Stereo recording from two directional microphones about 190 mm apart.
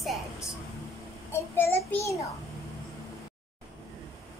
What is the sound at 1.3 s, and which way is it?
Child singing, 10° left (ahead or behind).